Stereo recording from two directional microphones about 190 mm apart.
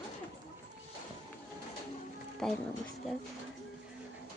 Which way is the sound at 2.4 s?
5° left (ahead or behind).